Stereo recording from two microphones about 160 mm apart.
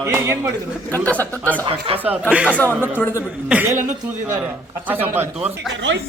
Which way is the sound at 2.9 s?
15° left (ahead or behind).